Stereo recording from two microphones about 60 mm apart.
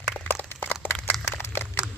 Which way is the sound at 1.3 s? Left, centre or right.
Left.